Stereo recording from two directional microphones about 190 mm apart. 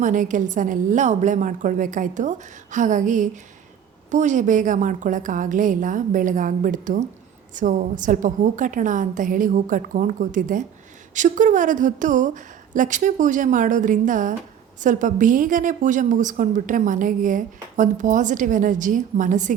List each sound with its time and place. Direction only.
0.0 s a woman's voice: 45° right (ahead or behind)